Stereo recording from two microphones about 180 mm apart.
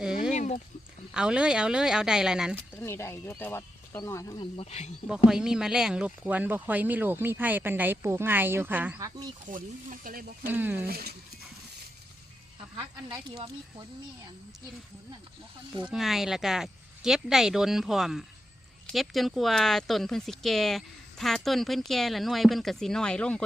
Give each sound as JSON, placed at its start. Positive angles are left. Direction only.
{"t": 0.0, "sound": "a sound", "side_deg": -5}
{"t": 0.3, "sound": "a sound", "side_deg": 40}
{"t": 1.1, "sound": "speech", "side_deg": -5}
{"t": 2.7, "sound": "speech", "side_deg": 15}
{"t": 5.0, "sound": "speech", "side_deg": -5}
{"t": 9.5, "sound": "speech", "side_deg": -50}
{"t": 10.5, "sound": "speech", "side_deg": -10}
{"t": 10.8, "sound": "speech", "side_deg": -60}
{"t": 13.3, "sound": "speech", "side_deg": -30}
{"t": 15.9, "sound": "speech", "side_deg": 0}